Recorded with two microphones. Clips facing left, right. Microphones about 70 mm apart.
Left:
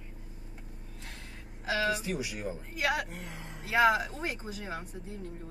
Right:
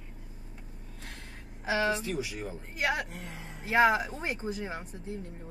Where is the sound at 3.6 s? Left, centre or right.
Right.